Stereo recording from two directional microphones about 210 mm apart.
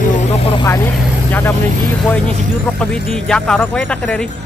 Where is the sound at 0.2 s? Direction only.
25° left (ahead or behind).